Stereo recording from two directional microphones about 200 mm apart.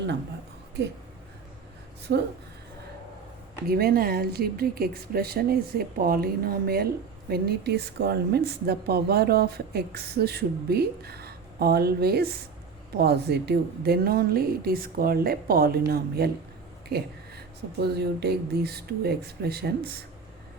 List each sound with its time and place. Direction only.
2.1 s speech: 55° right (ahead or behind)
3.7 s speech: 50° right (ahead or behind)